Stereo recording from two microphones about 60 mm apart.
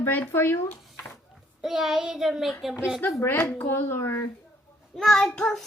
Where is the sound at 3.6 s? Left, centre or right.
Left.